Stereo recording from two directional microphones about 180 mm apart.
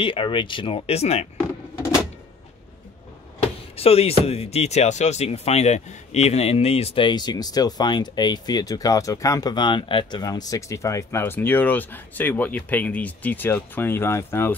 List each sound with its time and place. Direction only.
0.0 s speech: 30° left (ahead or behind)
3.7 s speech: 35° left (ahead or behind); by 14.5 s 15° left (ahead or behind)